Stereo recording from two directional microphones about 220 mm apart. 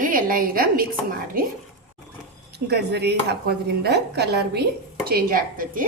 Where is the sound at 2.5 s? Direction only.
50° right (ahead or behind).